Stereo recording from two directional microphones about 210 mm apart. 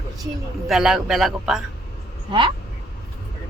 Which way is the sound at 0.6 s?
Centre (ahead or behind).